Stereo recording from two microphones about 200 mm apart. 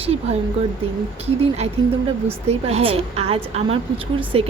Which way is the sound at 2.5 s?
30° right (ahead or behind).